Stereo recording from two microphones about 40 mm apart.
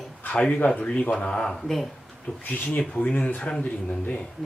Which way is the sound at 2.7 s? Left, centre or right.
Left.